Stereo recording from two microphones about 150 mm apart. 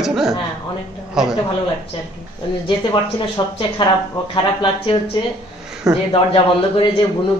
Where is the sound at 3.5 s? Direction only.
30° left (ahead or behind).